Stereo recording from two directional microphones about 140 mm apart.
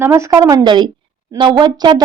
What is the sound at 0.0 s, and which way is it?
A woman's voice, 20° right (ahead or behind).